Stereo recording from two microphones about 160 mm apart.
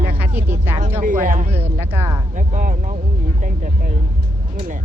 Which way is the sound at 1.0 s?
55° right (ahead or behind).